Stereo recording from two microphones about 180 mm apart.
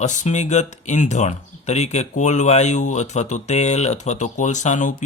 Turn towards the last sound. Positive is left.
turn(degrees=45)  # may be behind; listen again after turning